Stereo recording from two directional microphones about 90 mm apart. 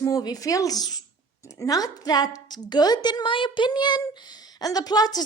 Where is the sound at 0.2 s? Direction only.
45° left (ahead or behind).